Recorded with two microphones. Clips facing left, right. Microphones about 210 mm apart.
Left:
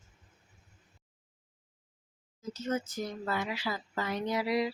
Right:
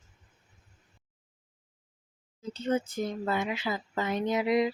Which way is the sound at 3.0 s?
20° right (ahead or behind).